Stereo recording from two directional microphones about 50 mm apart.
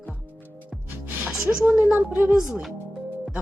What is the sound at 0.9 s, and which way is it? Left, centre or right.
Music, right.